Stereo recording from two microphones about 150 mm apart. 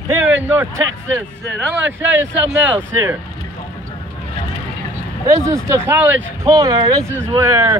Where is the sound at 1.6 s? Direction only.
10° right (ahead or behind).